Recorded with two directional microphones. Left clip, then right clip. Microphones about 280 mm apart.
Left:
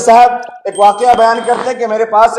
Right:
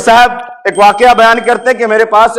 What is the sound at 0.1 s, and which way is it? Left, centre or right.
Speech, right.